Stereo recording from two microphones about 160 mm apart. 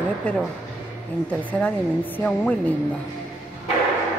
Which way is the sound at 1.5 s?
10° left (ahead or behind).